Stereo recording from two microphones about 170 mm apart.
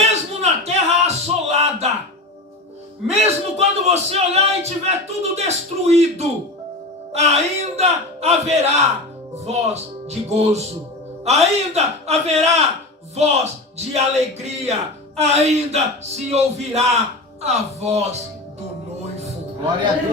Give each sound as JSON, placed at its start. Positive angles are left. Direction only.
{"t": 0.1, "sound": "a sound", "side_deg": -40}
{"t": 3.1, "sound": "a man's voice", "side_deg": -40}
{"t": 10.1, "sound": "a man's voice", "side_deg": -40}